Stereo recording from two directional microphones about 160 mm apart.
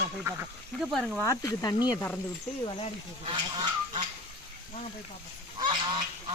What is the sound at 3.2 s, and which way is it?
Goose, 30° right (ahead or behind).